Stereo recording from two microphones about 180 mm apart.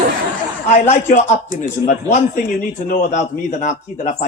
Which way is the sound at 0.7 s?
40° left (ahead or behind).